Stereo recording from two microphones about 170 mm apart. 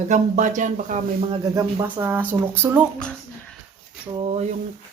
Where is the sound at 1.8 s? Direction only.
10° right (ahead or behind).